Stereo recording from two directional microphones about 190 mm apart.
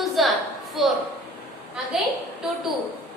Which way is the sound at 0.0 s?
Centre (ahead or behind).